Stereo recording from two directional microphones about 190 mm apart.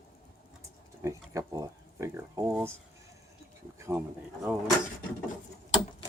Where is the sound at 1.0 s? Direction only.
15° right (ahead or behind).